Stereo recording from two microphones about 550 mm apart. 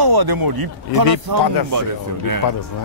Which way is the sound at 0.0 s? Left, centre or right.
Right.